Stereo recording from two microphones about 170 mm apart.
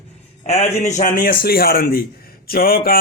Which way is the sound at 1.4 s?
65° left (ahead or behind).